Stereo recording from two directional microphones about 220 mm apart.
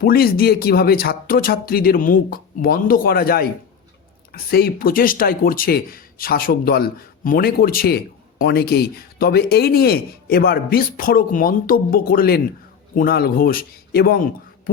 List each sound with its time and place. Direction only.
0.0 s speech: 45° left (ahead or behind)